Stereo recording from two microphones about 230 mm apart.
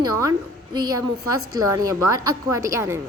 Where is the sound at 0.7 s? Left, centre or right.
Centre.